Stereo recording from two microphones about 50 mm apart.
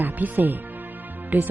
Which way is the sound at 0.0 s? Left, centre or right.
Right.